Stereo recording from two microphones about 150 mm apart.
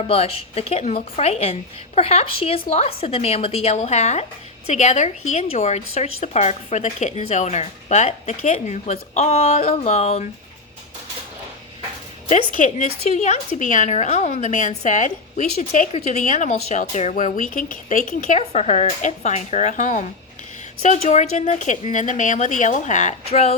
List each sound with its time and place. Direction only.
0.1 s speech: 40° left (ahead or behind)
12.5 s a woman's voice: 55° left (ahead or behind)